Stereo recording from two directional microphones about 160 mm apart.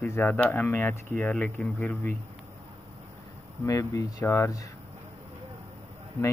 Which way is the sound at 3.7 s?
20° left (ahead or behind).